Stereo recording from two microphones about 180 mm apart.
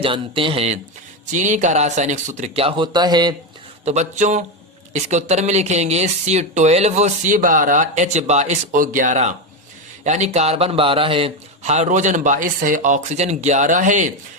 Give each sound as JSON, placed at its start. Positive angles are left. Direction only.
{"t": 0.0, "sound": "speech", "side_deg": -30}
{"t": 3.8, "sound": "speech", "side_deg": -40}